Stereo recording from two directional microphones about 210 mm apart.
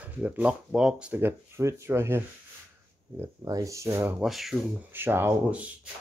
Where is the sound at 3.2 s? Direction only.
15° right (ahead or behind).